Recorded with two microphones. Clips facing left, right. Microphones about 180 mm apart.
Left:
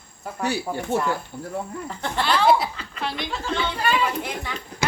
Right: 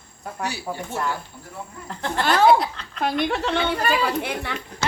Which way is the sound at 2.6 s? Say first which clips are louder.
Right 1 dB; 5° left (ahead or behind).